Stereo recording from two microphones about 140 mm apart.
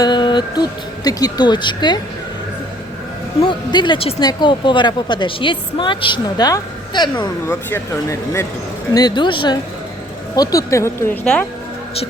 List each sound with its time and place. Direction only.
0.0 s a woman's voice: 35° left (ahead or behind)
3.4 s a woman's voice: 35° left (ahead or behind)
8.9 s a woman's voice: 30° left (ahead or behind)